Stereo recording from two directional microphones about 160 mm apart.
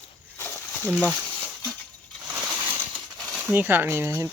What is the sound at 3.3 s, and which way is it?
Speech, 10° right (ahead or behind).